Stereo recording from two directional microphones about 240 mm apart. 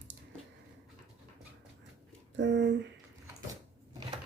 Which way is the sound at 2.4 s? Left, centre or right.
Right.